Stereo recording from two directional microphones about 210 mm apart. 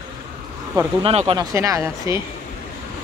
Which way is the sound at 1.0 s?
25° right (ahead or behind).